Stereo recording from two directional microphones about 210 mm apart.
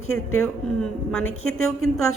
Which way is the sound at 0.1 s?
85° left.